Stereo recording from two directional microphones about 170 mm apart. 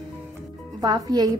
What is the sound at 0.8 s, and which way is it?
Speech, 25° right (ahead or behind).